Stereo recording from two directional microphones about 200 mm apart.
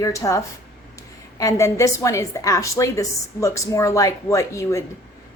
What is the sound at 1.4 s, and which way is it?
A woman's voice, 15° left (ahead or behind).